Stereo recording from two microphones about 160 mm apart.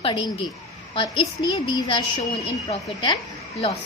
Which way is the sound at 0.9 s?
35° left (ahead or behind).